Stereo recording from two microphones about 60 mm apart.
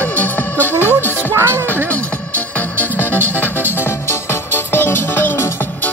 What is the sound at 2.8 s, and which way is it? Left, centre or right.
Music, left.